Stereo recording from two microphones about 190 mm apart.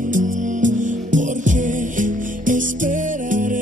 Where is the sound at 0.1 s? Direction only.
45° right (ahead or behind).